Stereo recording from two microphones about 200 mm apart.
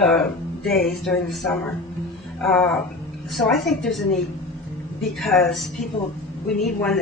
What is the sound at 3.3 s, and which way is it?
Speech, centre (ahead or behind).